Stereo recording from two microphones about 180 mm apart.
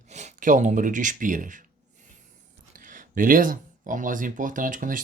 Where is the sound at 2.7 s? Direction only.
50° right (ahead or behind).